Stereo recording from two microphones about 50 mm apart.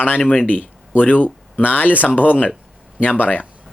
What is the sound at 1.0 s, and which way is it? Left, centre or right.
Speech, left.